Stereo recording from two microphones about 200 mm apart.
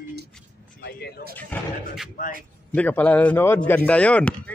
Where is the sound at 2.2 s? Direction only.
40° left (ahead or behind).